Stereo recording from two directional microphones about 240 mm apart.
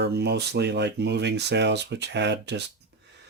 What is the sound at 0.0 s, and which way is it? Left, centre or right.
Speech, right.